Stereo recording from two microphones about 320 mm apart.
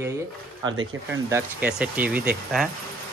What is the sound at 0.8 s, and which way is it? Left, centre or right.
Speech, right.